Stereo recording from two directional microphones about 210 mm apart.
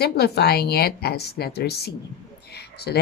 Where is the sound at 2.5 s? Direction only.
50° left (ahead or behind).